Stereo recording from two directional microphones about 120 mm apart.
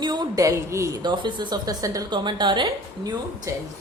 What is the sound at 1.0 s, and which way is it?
Speech, 40° right (ahead or behind).